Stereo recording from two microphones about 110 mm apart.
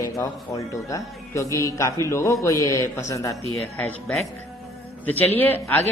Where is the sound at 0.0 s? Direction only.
30° left (ahead or behind).